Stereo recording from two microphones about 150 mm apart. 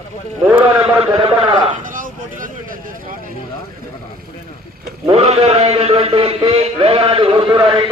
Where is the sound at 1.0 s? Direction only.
35° right (ahead or behind).